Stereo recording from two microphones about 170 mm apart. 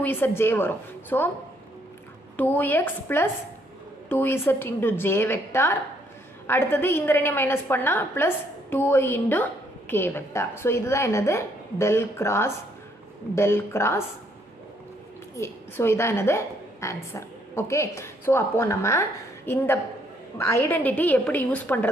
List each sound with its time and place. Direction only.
0.0 s a woman's voice: 10° left (ahead or behind)
2.3 s a woman's voice: 10° left (ahead or behind)
15.3 s a woman's voice: 15° left (ahead or behind)